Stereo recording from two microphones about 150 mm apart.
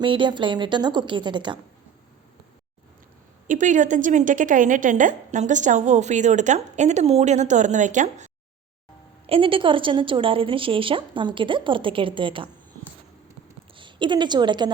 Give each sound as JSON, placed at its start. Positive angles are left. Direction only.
{"t": 0.0, "sound": "a woman's voice", "side_deg": -30}
{"t": 3.4, "sound": "a woman's voice", "side_deg": -60}
{"t": 9.2, "sound": "a woman's voice", "side_deg": -40}
{"t": 13.7, "sound": "a woman's voice", "side_deg": -30}